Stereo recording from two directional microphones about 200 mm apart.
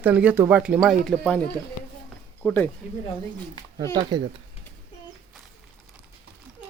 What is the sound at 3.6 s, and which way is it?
Speech, 20° left (ahead or behind).